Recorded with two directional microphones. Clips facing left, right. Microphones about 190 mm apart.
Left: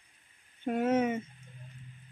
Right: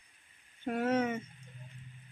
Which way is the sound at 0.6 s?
20° left (ahead or behind).